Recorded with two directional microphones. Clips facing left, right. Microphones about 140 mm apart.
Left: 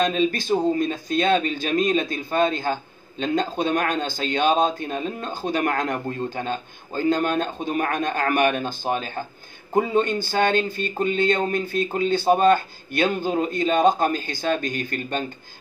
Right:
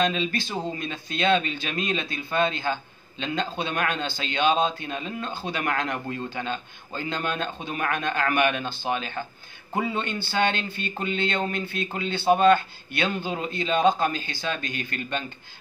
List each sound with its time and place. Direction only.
0.0 s speech: 45° left (ahead or behind)